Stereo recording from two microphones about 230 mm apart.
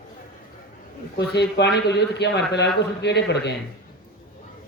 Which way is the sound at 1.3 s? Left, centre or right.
Left.